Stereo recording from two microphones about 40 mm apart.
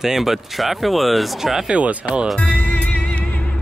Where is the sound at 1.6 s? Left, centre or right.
Right.